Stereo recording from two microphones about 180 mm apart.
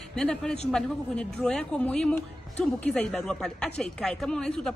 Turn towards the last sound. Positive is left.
turn(degrees=5)  # may be behind; listen again after turning